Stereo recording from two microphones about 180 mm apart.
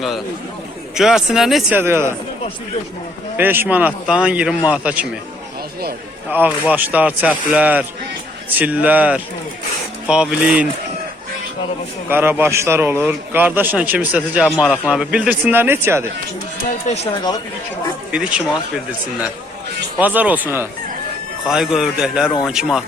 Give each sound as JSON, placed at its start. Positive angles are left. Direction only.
{"t": 0.9, "sound": "speech", "side_deg": -5}
{"t": 1.8, "sound": "a man's voice", "side_deg": -15}
{"t": 3.3, "sound": "a man's voice", "side_deg": -10}
{"t": 6.3, "sound": "a man's voice", "side_deg": -10}
{"t": 12.0, "sound": "a man's voice", "side_deg": -10}
{"t": 16.6, "sound": "speech", "side_deg": 35}
{"t": 18.1, "sound": "a man's voice", "side_deg": -5}